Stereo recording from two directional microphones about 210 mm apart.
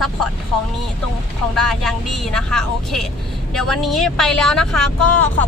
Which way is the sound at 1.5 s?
Centre (ahead or behind).